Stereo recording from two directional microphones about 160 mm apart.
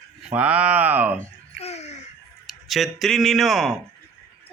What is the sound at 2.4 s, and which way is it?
Speech, centre (ahead or behind).